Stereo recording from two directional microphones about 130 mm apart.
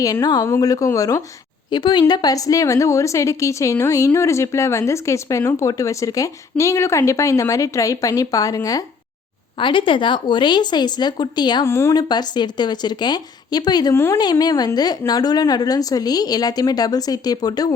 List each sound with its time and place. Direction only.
0.0 s a woman's voice: 30° left (ahead or behind)
1.7 s a woman's voice: 35° left (ahead or behind)
9.6 s speech: 40° left (ahead or behind)
11.6 s a woman's voice: 20° left (ahead or behind)
11.9 s speech: 35° left (ahead or behind)
13.9 s a woman's voice: 20° left (ahead or behind)
14.2 s a woman's voice: 30° left (ahead or behind)